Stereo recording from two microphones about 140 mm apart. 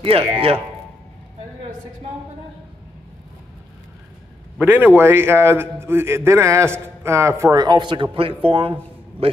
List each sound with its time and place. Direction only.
0.0 s a man's voice: 40° right (ahead or behind)
4.6 s a man's voice: 15° right (ahead or behind); by 8.7 s 40° right (ahead or behind)